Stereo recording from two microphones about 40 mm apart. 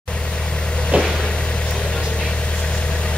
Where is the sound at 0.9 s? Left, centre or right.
Right.